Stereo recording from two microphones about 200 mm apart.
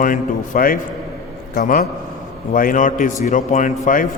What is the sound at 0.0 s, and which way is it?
A man's voice, 40° left (ahead or behind).